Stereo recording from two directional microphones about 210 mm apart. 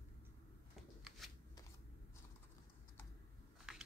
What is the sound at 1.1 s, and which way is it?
Shuffling cards, 5° right (ahead or behind).